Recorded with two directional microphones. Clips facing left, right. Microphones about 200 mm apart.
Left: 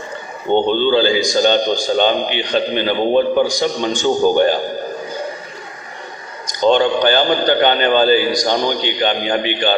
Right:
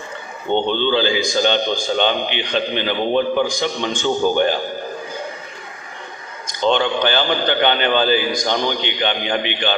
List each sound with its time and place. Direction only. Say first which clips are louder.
0.7 s a man's voice: left 4 dB; 45° left (ahead or behind)
6.4 s a man's voice: left 4 dB; 40° left (ahead or behind)